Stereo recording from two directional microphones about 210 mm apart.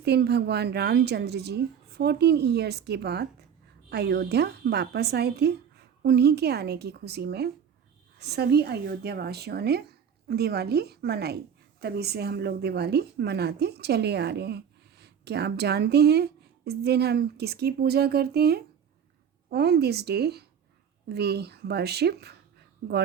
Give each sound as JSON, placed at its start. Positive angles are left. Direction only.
{"t": 0.0, "sound": "a woman's voice", "side_deg": -50}